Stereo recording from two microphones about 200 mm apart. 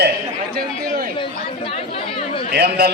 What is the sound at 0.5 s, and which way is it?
Chatter, 45° right (ahead or behind).